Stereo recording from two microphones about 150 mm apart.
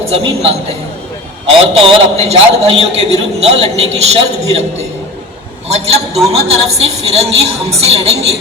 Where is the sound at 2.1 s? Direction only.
45° right (ahead or behind).